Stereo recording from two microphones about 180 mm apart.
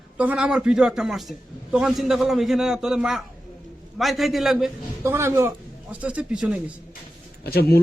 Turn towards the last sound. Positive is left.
turn(degrees=60)  # may be behind; listen again after turning